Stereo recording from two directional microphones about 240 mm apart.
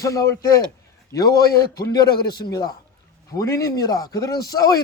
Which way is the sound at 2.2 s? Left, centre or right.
Left.